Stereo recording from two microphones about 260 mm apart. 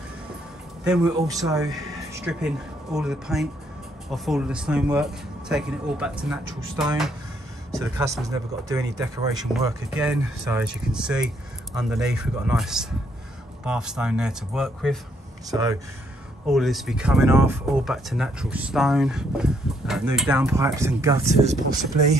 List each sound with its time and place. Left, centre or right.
1.2 s speech: centre
16.4 s speech: centre
21.3 s speech: right